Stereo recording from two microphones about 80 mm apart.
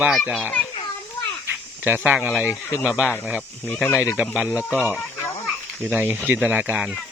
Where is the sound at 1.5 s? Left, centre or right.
Right.